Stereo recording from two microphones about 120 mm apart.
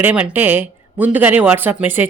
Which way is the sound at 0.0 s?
15° right (ahead or behind).